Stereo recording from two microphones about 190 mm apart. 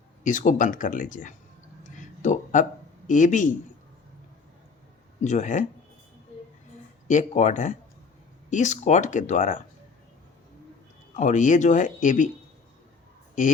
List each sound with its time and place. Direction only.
0.3 s speech: 40° left (ahead or behind)
1.8 s a sound: 40° left (ahead or behind)
3.1 s speech: 40° left (ahead or behind)
5.2 s speech: 40° left (ahead or behind)
7.1 s speech: 40° left (ahead or behind)
11.2 s speech: 40° left (ahead or behind)